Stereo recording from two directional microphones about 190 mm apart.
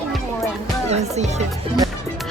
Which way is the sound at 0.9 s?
35° right (ahead or behind).